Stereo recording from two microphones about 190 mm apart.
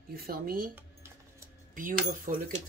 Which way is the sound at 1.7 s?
45° right (ahead or behind).